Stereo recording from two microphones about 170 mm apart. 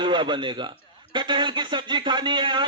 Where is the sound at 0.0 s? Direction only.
25° right (ahead or behind).